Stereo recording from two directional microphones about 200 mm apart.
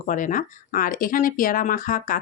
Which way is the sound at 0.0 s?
40° left (ahead or behind).